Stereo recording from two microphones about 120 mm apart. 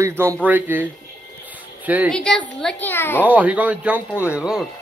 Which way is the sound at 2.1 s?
5° left (ahead or behind).